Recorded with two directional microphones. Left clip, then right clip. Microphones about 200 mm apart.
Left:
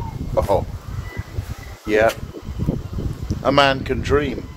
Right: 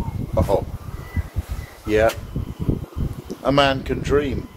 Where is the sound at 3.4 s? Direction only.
15° left (ahead or behind).